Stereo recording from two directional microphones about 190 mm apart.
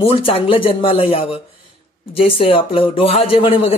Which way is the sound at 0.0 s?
30° left (ahead or behind).